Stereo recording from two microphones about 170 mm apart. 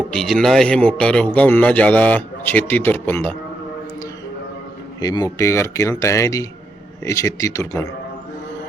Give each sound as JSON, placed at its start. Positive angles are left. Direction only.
{"t": 0.1, "sound": "speech", "side_deg": 5}
{"t": 4.9, "sound": "speech", "side_deg": 25}